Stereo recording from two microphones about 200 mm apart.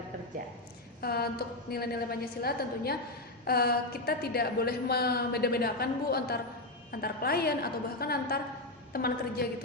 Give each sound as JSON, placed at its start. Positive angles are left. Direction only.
{"t": 1.0, "sound": "a woman's voice", "side_deg": 50}